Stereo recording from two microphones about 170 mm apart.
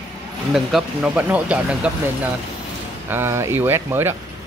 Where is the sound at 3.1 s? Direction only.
15° right (ahead or behind).